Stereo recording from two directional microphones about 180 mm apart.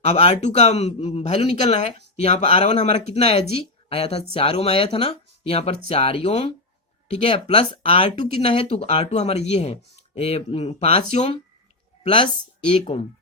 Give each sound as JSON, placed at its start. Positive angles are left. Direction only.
{"t": 0.0, "sound": "a man's voice", "side_deg": 35}
{"t": 12.9, "sound": "a man's voice", "side_deg": 35}